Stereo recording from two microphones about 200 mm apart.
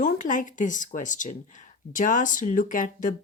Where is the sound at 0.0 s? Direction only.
40° left (ahead or behind).